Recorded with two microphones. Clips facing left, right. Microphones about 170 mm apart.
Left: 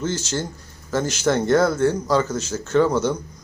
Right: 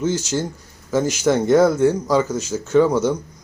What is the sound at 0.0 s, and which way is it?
Speech, 10° right (ahead or behind).